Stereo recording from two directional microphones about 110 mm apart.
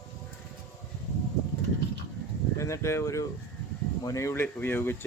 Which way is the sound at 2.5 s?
25° left (ahead or behind).